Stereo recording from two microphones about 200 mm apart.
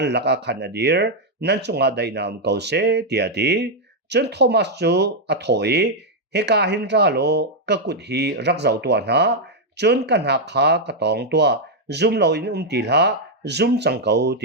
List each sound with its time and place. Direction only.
0.0 s speech: 55° right (ahead or behind)